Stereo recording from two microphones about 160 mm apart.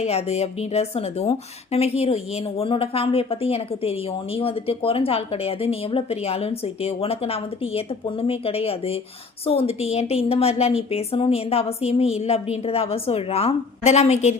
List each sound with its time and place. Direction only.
0.0 s a woman's voice: 40° left (ahead or behind)